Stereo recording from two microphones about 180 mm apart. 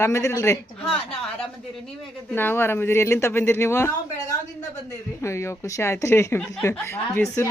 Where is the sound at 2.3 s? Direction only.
10° left (ahead or behind).